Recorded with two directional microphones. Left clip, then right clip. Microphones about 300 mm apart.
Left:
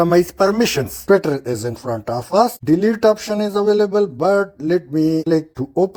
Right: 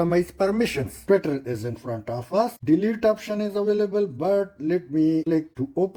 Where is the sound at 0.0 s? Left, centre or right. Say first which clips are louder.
Left 8 dB; centre.